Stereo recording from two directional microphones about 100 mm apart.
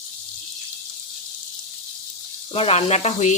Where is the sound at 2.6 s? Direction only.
80° left.